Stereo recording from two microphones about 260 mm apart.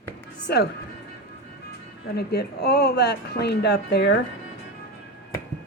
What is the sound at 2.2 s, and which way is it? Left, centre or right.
Speech, left.